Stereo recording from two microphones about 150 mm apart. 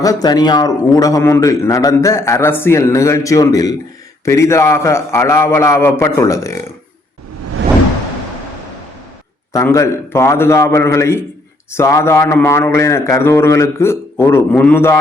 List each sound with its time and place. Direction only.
0.0 s a man's voice: 25° left (ahead or behind)
9.5 s speech: 20° left (ahead or behind)